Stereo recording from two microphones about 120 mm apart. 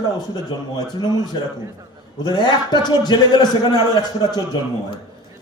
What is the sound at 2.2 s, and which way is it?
A man's voice, 35° left (ahead or behind).